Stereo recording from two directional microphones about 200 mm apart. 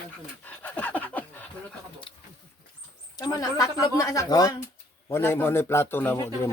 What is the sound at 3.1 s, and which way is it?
Speech, 20° left (ahead or behind).